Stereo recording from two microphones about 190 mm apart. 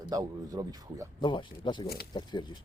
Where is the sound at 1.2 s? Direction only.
25° left (ahead or behind).